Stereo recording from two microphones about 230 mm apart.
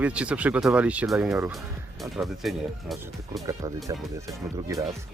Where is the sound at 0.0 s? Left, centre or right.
Centre.